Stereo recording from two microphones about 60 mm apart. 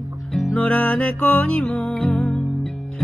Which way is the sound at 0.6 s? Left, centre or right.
Left.